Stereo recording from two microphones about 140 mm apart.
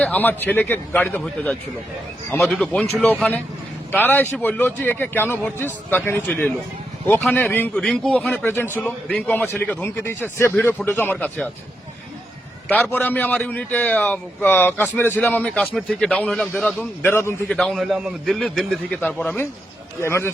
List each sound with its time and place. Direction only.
0.0 s a man's voice: 10° left (ahead or behind)
2.3 s a man's voice: centre (ahead or behind)
7.8 s a man's voice: 5° left (ahead or behind)
8.4 s a man's voice: 15° left (ahead or behind)
12.6 s a man's voice: 15° left (ahead or behind)
17.5 s a man's voice: 5° left (ahead or behind); by 20.3 s 20° left (ahead or behind)